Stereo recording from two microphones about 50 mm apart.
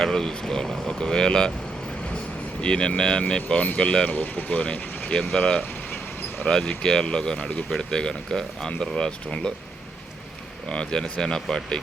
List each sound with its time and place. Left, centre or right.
0.0 s speech: centre
2.6 s speech: centre
4.1 s speech: left; by 9.5 s centre
10.7 s speech: centre